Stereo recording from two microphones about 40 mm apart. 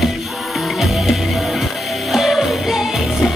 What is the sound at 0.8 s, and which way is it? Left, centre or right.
Music, centre.